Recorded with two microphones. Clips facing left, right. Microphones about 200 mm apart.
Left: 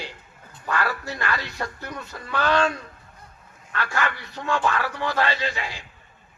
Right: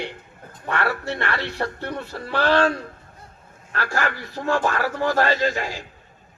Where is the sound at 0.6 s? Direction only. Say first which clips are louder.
Right 2 dB; 25° right (ahead or behind); by 5.8 s 45° right (ahead or behind).